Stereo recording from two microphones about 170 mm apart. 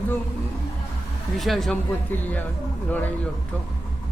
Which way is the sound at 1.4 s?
Centre (ahead or behind).